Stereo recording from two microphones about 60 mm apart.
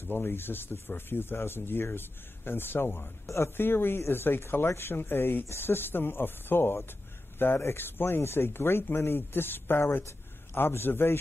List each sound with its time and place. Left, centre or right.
0.0 s speech: left